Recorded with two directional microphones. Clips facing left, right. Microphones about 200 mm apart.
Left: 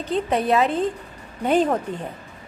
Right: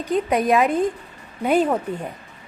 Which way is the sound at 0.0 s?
10° right (ahead or behind).